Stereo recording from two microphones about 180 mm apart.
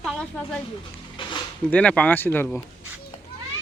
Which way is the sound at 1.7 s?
5° left (ahead or behind).